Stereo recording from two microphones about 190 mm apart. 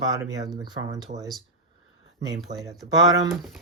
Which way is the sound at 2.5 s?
35° right (ahead or behind).